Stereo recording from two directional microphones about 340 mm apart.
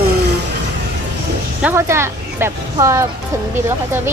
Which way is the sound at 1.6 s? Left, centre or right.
Centre.